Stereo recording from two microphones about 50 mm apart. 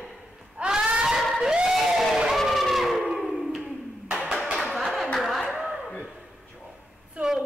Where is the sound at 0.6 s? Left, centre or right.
Centre.